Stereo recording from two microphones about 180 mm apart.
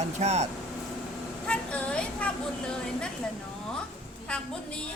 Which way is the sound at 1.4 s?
5° left (ahead or behind).